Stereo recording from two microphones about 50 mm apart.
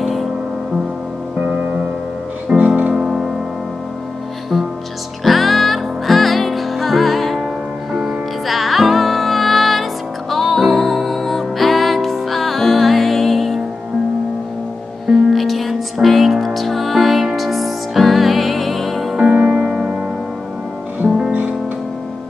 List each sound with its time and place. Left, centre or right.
0.0 s music: centre
2.5 s music: right
5.2 s music: centre
7.9 s music: centre
8.5 s music: centre
15.0 s music: centre
19.1 s music: centre